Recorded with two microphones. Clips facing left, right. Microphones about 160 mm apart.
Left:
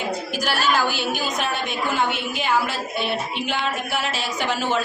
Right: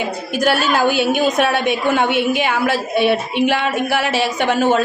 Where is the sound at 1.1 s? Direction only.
65° right (ahead or behind).